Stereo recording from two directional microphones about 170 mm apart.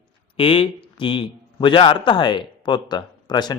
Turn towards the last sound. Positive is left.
turn(degrees=25)  # may be behind; listen again after turning